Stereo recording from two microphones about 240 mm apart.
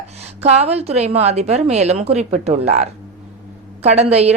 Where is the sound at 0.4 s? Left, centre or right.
Right.